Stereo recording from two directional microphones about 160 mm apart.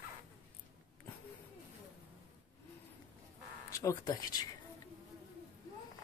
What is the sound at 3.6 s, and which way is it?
Speech, 20° left (ahead or behind).